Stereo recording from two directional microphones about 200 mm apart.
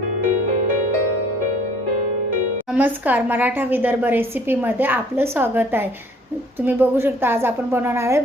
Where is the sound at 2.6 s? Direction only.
10° right (ahead or behind).